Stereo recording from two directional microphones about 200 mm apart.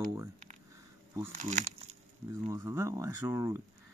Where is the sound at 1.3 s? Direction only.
40° right (ahead or behind).